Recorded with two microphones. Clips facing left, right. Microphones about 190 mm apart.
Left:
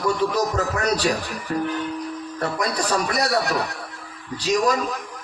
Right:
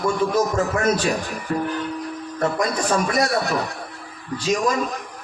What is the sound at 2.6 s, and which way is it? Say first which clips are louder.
Speech: even; 35° left (ahead or behind).